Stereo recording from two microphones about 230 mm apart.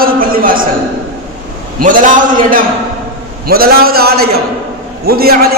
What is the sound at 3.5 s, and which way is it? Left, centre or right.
A man's voice, right.